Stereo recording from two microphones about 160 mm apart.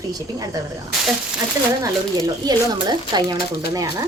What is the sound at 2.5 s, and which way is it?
Speech, 25° right (ahead or behind).